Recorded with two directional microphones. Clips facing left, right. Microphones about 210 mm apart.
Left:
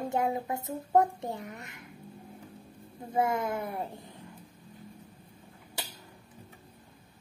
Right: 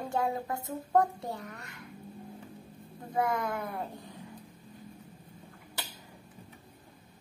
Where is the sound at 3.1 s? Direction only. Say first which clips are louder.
Left 2 dB; 25° left (ahead or behind).